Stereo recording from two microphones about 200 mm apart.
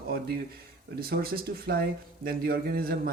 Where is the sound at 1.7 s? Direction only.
50° right (ahead or behind).